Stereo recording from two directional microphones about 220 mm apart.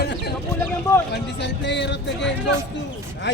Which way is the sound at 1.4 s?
50° left (ahead or behind).